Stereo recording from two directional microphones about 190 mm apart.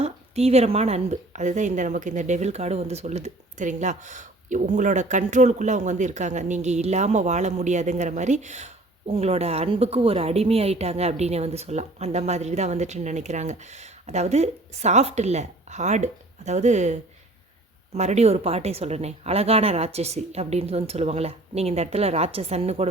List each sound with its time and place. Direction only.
0.0 s a woman's voice: 35° right (ahead or behind)